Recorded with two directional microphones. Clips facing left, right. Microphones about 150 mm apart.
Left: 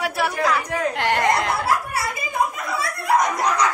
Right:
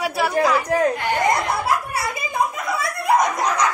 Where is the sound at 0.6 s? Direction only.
40° right (ahead or behind).